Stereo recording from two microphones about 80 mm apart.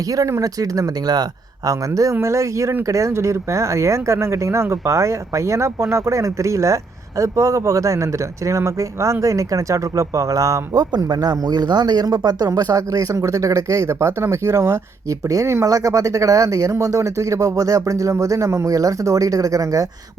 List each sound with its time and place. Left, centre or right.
0.2 s speech: right
15.3 s speech: right